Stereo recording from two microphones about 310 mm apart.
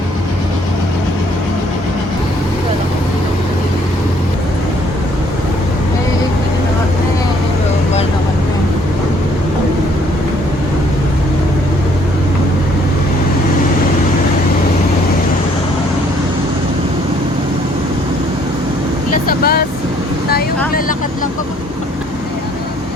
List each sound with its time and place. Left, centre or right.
19.1 s vehicle: left